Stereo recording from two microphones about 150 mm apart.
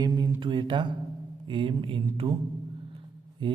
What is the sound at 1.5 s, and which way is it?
Speech, 35° right (ahead or behind).